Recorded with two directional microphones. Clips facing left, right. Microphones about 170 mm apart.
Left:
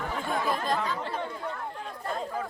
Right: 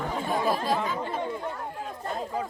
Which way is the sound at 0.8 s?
20° right (ahead or behind).